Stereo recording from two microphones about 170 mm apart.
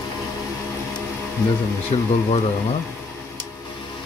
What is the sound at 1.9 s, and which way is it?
Speech, 30° left (ahead or behind).